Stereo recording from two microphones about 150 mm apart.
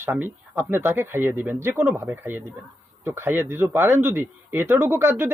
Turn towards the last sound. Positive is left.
turn(degrees=-15)  # may be behind; listen again after turning